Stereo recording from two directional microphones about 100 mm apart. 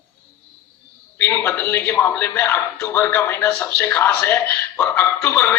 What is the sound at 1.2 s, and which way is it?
A man's voice, 25° left (ahead or behind).